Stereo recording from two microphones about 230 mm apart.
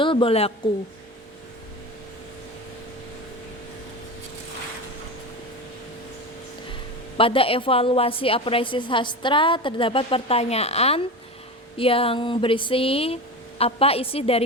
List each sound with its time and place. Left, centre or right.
0.0 s a woman's voice: left
7.2 s a woman's voice: left